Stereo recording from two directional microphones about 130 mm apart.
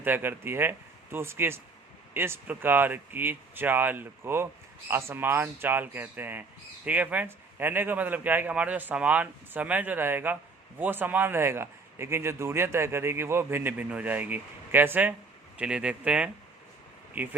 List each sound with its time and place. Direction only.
0.0 s speech: 15° right (ahead or behind)